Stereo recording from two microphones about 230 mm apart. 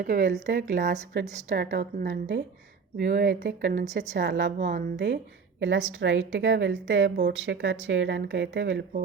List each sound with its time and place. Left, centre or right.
0.0 s a woman's voice: right
1.5 s a woman's voice: right